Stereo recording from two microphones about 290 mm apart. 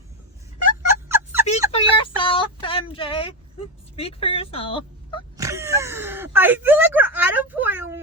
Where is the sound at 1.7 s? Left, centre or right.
Centre.